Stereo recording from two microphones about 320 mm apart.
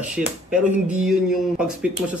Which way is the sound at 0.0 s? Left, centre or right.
Centre.